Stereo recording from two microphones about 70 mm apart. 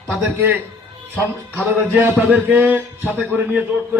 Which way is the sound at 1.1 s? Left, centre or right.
Centre.